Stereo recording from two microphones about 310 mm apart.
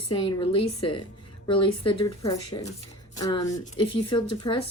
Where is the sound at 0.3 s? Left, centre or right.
Centre.